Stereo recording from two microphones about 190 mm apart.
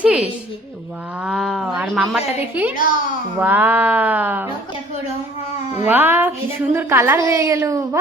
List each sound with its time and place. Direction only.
0.0 s speech: 5° right (ahead or behind)
2.7 s a child's voice: 45° left (ahead or behind)
3.4 s a woman's voice: 10° right (ahead or behind)
5.8 s a woman's voice: 10° right (ahead or behind)